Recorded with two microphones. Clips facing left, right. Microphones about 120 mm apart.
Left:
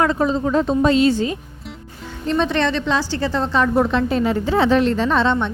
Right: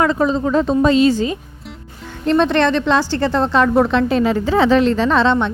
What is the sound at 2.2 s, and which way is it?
A woman's voice, 70° right (ahead or behind).